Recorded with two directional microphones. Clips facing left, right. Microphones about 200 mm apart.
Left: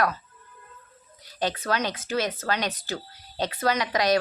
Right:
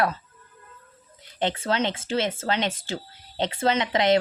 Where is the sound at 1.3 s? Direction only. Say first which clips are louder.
Right 2 dB; 25° right (ahead or behind).